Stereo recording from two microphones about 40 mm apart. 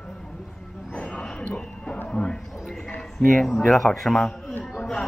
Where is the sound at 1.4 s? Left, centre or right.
Left.